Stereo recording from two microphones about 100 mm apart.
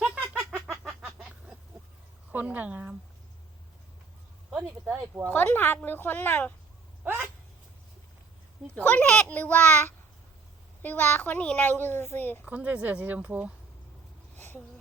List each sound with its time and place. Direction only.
0.0 s a sound: 15° right (ahead or behind)
2.3 s speech: 15° right (ahead or behind)
4.5 s speech: 15° right (ahead or behind)
5.3 s a child's voice: 20° left (ahead or behind)
7.0 s speech: 20° right (ahead or behind)
8.8 s a child's voice: 15° left (ahead or behind)
12.5 s speech: 15° right (ahead or behind)
14.3 s a sound: 20° left (ahead or behind)